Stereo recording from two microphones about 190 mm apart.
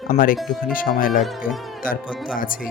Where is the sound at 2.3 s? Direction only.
45° left (ahead or behind).